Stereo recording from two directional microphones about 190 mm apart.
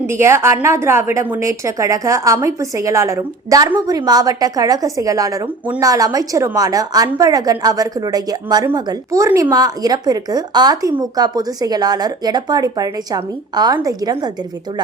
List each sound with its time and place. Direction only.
0.1 s a woman's voice: 15° right (ahead or behind)